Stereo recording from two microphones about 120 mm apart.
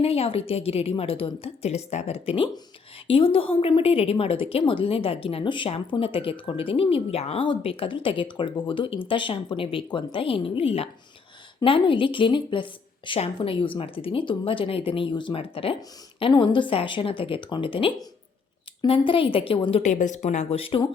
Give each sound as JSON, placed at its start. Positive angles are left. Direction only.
{"t": 0.0, "sound": "a woman's voice", "side_deg": 55}
{"t": 13.1, "sound": "a woman's voice", "side_deg": 55}
{"t": 19.8, "sound": "speech", "side_deg": 90}